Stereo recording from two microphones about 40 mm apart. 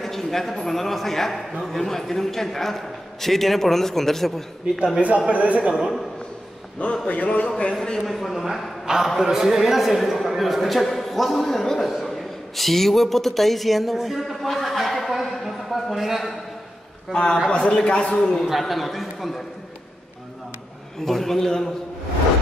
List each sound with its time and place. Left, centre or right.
0.0 s a man's voice: centre
5.3 s speech: right
7.1 s a man's voice: left
8.0 s a man's voice: centre
8.8 s a man's voice: centre
17.1 s a man's voice: centre
17.5 s a man's voice: left
18.5 s a man's voice: centre
21.0 s a man's voice: centre